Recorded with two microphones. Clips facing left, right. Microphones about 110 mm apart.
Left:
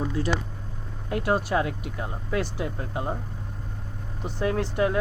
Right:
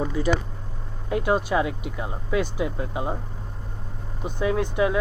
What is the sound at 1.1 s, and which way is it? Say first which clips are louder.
Speech: right 2 dB; centre (ahead or behind).